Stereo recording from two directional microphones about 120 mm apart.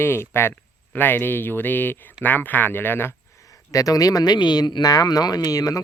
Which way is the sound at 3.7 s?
30° left (ahead or behind).